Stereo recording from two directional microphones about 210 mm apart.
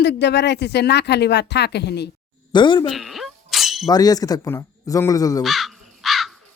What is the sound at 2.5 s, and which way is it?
Speech, 20° left (ahead or behind).